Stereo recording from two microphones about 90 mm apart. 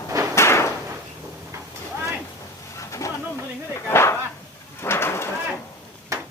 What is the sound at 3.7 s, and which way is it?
Dog, 30° left (ahead or behind).